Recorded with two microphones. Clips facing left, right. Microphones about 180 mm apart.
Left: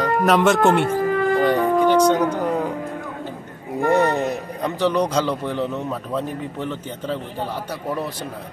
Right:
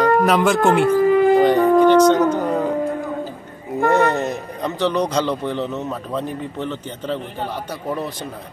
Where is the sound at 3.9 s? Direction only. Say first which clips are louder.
Right 1 dB; 10° left (ahead or behind).